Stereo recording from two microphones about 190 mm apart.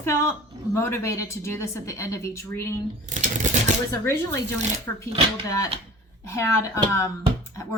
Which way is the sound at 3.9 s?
15° left (ahead or behind).